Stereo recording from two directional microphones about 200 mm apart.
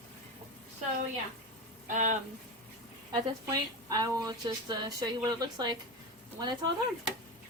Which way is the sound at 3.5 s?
20° right (ahead or behind).